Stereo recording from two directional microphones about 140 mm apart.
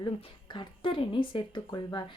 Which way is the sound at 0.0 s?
35° left (ahead or behind).